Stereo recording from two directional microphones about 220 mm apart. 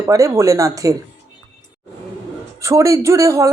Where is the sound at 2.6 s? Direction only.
15° right (ahead or behind).